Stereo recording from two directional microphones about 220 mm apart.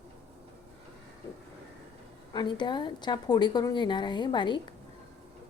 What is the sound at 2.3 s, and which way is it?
A woman's voice, 20° left (ahead or behind).